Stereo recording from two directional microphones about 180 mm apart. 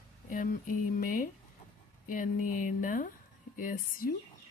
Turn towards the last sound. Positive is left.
turn(degrees=50)  # may be behind; listen again after turning